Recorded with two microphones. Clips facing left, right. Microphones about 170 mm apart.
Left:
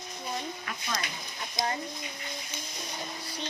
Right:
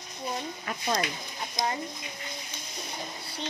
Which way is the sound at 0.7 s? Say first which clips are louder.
Right 6 dB; 35° right (ahead or behind).